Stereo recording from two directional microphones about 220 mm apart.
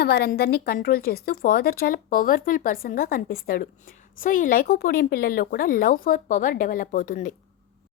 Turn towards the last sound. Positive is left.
turn(degrees=35)  # may be behind; listen again after turning